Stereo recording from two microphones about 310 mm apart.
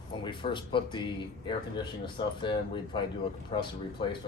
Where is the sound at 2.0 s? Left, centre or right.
Centre.